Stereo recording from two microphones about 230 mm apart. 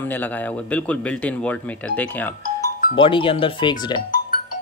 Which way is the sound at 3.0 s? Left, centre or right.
Left.